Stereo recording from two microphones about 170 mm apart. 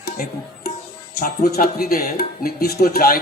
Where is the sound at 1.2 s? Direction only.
60° left (ahead or behind).